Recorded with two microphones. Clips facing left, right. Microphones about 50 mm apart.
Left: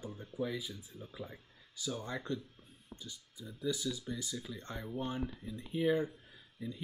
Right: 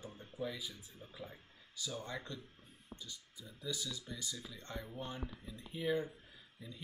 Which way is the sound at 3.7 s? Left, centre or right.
Centre.